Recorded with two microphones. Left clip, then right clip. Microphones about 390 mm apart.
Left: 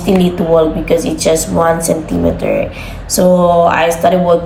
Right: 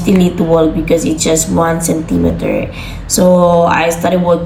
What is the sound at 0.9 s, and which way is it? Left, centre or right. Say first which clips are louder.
Speech: even; centre.